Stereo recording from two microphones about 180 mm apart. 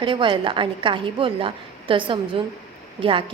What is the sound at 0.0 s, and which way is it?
A woman's voice, 25° right (ahead or behind).